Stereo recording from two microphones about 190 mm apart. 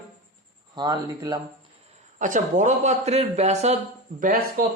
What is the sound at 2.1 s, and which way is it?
Speech, 40° right (ahead or behind).